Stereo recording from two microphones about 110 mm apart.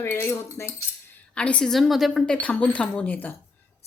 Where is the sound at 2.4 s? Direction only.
10° left (ahead or behind).